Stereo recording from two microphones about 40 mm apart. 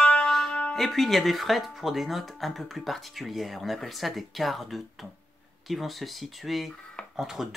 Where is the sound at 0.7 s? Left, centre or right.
Centre.